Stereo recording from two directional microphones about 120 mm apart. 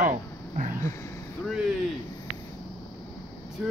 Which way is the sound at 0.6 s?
90° right.